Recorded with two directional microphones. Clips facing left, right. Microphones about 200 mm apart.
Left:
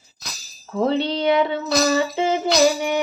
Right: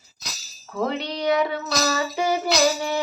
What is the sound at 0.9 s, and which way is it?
Music, 30° left (ahead or behind).